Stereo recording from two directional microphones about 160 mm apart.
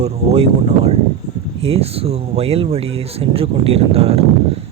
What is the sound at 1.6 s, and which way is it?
Speech, 40° right (ahead or behind).